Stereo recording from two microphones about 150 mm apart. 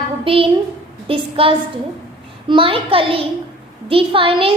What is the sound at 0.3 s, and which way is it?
A woman's voice, 35° right (ahead or behind).